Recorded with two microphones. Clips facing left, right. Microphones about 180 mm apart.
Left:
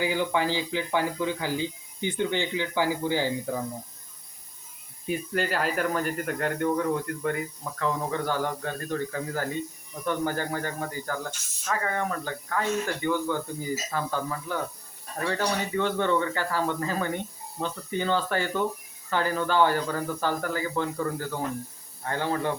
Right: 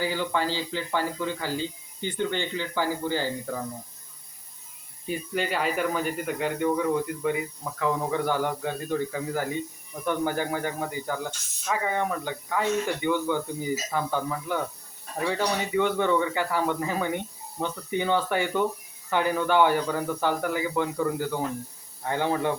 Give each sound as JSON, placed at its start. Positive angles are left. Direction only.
{"t": 0.0, "sound": "speech", "side_deg": 15}
{"t": 5.0, "sound": "speech", "side_deg": 0}